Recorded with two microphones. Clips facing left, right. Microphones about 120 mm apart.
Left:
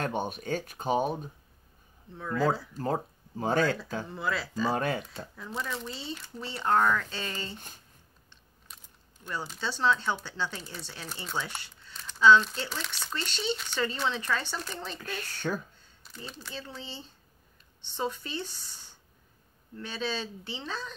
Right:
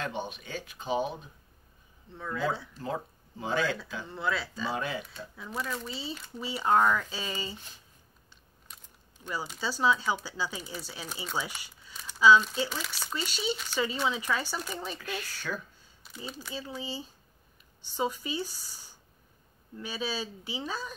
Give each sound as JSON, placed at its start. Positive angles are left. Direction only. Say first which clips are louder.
{"t": 0.0, "sound": "speech", "louder": "left 4 dB", "side_deg": 50}
{"t": 2.0, "sound": "speech", "louder": "left 4 dB", "side_deg": 0}
{"t": 2.8, "sound": "speech", "louder": "left 4 dB", "side_deg": 45}
{"t": 4.1, "sound": "speech", "louder": "right 3 dB", "side_deg": 0}
{"t": 4.7, "sound": "speech", "louder": "left 4 dB", "side_deg": 50}
{"t": 5.9, "sound": "speech", "louder": "even", "side_deg": 0}
{"t": 8.7, "sound": "a sound", "louder": "even", "side_deg": 5}
{"t": 9.2, "sound": "speech", "louder": "even", "side_deg": -5}
{"t": 15.0, "sound": "speech", "louder": "right 1 dB", "side_deg": 40}
{"t": 16.0, "sound": "speech", "louder": "right 2 dB", "side_deg": -5}